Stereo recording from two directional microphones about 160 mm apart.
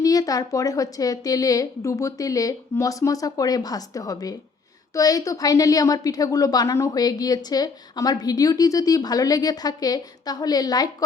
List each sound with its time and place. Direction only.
0.0 s a woman's voice: 20° left (ahead or behind)